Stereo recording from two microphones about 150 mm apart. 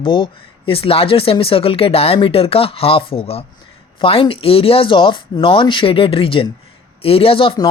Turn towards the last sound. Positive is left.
turn(degrees=35)  # may be behind; listen again after turning